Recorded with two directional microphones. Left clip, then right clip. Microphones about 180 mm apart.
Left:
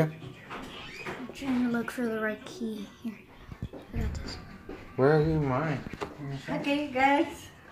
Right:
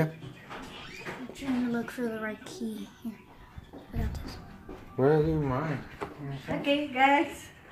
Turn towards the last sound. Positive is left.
turn(degrees=5)  # may be behind; listen again after turning